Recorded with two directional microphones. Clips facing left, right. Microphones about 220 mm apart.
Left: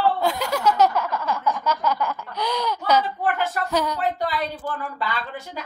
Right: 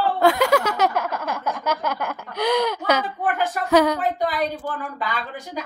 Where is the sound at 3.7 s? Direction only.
70° right (ahead or behind).